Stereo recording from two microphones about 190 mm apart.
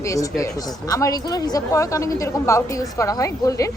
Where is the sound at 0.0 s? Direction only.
15° left (ahead or behind).